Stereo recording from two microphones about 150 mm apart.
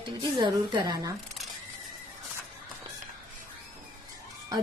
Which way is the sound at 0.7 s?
25° right (ahead or behind).